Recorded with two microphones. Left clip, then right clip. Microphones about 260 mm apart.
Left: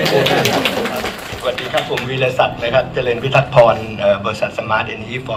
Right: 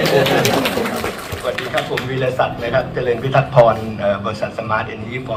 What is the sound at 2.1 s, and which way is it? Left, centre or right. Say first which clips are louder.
A man's voice: left 3 dB; left.